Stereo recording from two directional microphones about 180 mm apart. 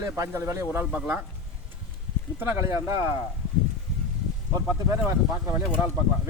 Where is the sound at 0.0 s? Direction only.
15° right (ahead or behind).